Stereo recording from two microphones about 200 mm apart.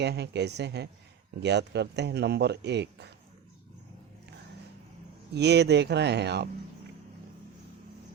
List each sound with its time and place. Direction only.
0.0 s speech: 55° right (ahead or behind)
5.3 s speech: 55° right (ahead or behind)